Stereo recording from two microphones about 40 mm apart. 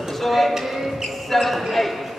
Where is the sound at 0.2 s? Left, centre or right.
Centre.